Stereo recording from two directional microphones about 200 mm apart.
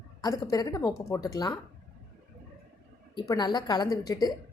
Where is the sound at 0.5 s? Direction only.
15° left (ahead or behind).